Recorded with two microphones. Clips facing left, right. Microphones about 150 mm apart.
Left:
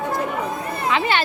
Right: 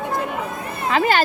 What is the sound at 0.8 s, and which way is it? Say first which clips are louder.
Speech: right 3 dB; 45° right (ahead or behind).